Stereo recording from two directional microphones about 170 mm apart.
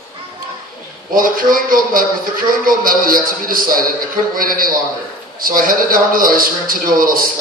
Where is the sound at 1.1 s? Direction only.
55° right (ahead or behind).